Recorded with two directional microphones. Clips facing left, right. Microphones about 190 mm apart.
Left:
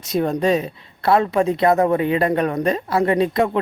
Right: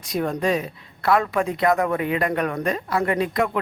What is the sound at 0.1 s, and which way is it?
A woman's voice, 30° left (ahead or behind).